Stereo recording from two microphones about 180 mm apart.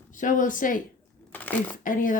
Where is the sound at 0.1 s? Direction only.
45° left (ahead or behind).